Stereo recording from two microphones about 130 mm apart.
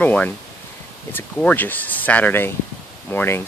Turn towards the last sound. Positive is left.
turn(degrees=15)  # may be behind; listen again after turning